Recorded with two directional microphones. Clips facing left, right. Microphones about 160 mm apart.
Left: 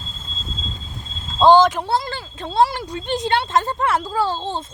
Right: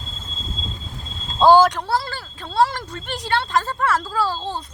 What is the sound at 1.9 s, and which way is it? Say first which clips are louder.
Speech: left 1 dB; 20° left (ahead or behind).